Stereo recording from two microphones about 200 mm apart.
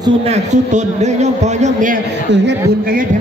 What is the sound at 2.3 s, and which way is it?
Speech, 60° right (ahead or behind).